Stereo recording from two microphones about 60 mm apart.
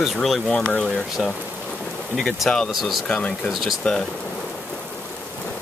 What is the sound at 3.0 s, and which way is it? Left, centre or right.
Speech, left.